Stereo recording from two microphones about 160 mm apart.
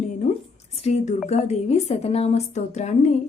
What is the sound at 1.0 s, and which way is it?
Speech, 45° left (ahead or behind).